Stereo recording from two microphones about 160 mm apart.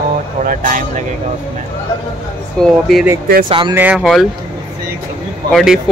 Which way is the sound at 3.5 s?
30° right (ahead or behind).